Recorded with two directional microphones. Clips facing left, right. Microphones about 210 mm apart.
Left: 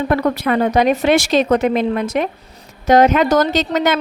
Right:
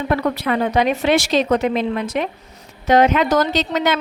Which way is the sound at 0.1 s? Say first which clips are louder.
Left 1 dB; 45° left (ahead or behind).